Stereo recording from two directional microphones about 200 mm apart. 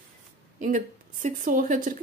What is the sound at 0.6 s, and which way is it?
A woman's voice, 40° right (ahead or behind).